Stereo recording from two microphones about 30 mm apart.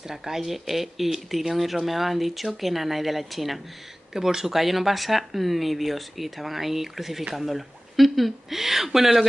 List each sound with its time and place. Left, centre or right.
0.1 s speech: centre
4.1 s speech: centre
4.6 s speech: centre